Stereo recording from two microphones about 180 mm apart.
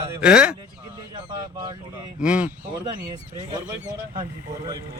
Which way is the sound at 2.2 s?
5° right (ahead or behind).